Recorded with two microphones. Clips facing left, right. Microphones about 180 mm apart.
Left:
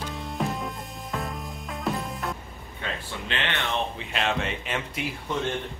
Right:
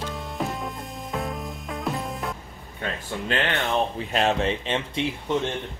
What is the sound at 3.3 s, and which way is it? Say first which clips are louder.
Speech: right 5 dB; 40° right (ahead or behind).